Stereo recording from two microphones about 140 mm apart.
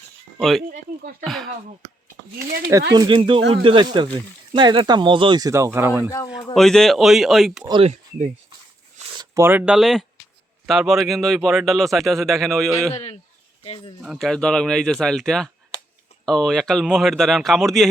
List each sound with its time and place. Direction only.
0.3 s speech: centre (ahead or behind)
2.6 s speech: 25° right (ahead or behind)
5.5 s speech: 20° right (ahead or behind)
6.3 s speech: centre (ahead or behind)
7.8 s speech: 50° right (ahead or behind)
9.1 s speech: 20° right (ahead or behind); by 12.9 s centre (ahead or behind)
12.9 s speech: 45° left (ahead or behind)
14.0 s speech: centre (ahead or behind)